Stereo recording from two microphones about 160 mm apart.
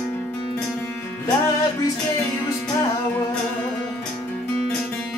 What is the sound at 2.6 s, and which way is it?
Music, 15° left (ahead or behind).